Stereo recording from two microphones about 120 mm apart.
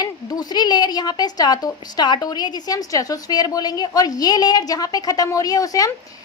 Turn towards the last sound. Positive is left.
turn(degrees=30)  # may be behind; listen again after turning